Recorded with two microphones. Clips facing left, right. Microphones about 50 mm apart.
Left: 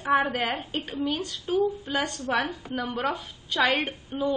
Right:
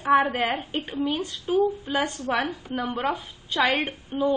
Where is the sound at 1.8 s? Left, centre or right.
Centre.